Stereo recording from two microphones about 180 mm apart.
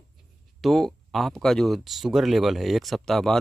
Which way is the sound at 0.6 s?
Centre (ahead or behind).